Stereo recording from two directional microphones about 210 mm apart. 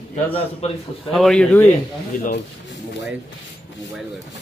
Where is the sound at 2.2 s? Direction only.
55° left (ahead or behind).